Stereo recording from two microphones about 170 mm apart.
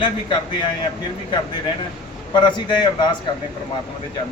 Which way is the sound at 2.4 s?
25° left (ahead or behind).